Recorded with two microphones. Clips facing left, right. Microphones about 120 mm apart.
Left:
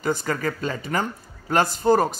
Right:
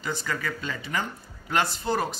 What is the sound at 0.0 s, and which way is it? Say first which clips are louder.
Speech: left 7 dB; 45° left (ahead or behind).